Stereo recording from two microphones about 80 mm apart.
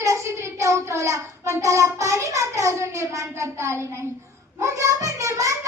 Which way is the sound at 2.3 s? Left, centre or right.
Right.